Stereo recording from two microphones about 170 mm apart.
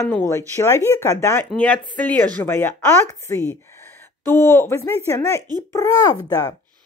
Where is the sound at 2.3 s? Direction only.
10° left (ahead or behind).